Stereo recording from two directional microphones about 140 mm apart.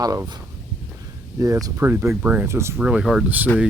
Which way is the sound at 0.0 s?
25° right (ahead or behind).